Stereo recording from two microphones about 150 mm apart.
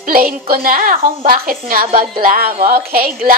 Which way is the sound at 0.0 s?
70° right (ahead or behind).